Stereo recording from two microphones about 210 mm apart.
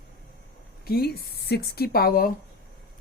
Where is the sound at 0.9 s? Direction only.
50° left (ahead or behind).